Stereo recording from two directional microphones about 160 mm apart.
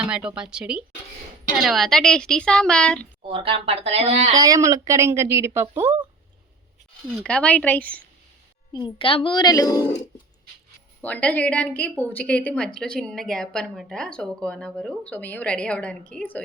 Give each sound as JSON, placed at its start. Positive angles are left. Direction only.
{"t": 0.0, "sound": "a woman's voice", "side_deg": -5}
{"t": 3.2, "sound": "speech", "side_deg": -35}
{"t": 4.4, "sound": "a woman's voice", "side_deg": -20}
{"t": 7.1, "sound": "a woman's voice", "side_deg": 5}
{"t": 8.7, "sound": "a child's voice", "side_deg": 30}
{"t": 11.0, "sound": "a woman's voice", "side_deg": 10}